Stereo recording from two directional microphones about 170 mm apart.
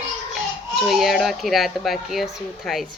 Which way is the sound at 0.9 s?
Centre (ahead or behind).